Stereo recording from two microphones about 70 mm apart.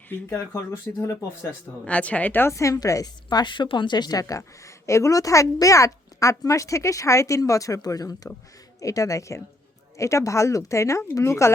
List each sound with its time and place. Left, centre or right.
0.3 s speech: left
0.9 s speech: left
1.8 s speech: centre
2.4 s a woman's voice: left
3.2 s a woman's voice: left